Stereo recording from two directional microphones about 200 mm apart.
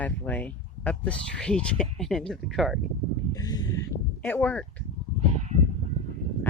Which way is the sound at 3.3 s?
20° left (ahead or behind).